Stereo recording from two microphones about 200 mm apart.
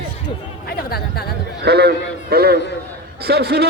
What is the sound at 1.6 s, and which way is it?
A man's voice, 55° right (ahead or behind).